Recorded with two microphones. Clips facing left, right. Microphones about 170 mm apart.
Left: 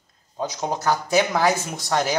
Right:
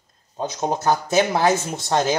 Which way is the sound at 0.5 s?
20° right (ahead or behind).